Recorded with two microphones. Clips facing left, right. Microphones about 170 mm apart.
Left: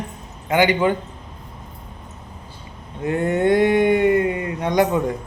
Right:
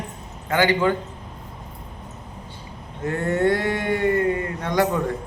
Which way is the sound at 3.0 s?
15° left (ahead or behind).